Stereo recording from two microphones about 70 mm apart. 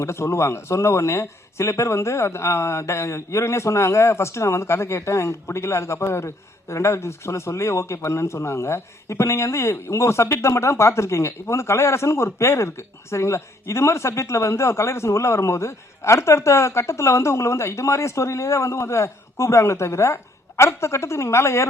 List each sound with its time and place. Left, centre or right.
0.0 s speech: left